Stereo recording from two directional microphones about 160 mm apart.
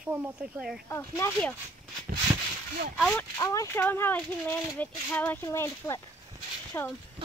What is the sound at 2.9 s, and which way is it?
Speech, 5° left (ahead or behind).